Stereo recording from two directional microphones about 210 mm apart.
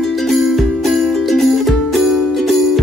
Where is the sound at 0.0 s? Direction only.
Centre (ahead or behind).